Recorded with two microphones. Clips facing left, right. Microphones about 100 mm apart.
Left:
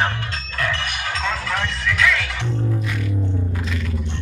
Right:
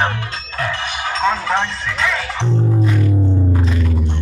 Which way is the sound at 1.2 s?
30° right (ahead or behind).